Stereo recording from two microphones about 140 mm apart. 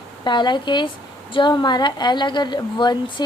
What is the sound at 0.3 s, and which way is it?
A woman's voice, 35° left (ahead or behind).